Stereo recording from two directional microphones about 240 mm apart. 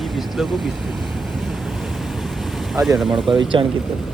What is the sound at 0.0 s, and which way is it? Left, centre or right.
Speech, centre.